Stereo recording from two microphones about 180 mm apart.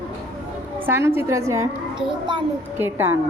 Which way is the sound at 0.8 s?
15° right (ahead or behind).